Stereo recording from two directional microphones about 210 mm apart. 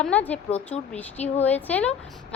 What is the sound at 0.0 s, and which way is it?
A woman's voice, 5° left (ahead or behind).